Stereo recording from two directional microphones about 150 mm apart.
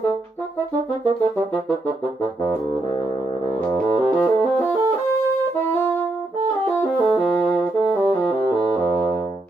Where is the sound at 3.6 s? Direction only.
10° left (ahead or behind).